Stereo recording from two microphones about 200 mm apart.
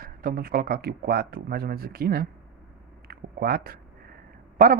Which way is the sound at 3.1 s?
50° right (ahead or behind).